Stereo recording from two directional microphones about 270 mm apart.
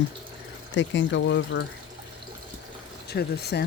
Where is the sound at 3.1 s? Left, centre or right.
Left.